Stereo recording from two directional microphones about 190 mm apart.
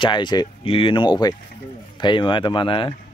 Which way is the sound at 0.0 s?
25° left (ahead or behind).